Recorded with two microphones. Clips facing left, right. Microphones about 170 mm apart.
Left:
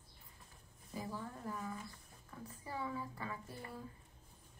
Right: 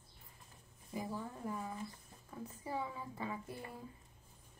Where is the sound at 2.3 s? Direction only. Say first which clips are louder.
Right 4 dB; 20° right (ahead or behind).